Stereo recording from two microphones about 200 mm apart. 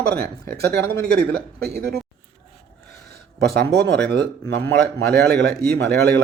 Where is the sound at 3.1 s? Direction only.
50° right (ahead or behind).